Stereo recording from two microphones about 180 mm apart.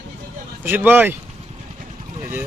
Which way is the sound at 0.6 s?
10° right (ahead or behind).